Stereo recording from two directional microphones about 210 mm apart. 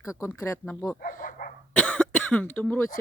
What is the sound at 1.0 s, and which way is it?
Speech, 40° left (ahead or behind).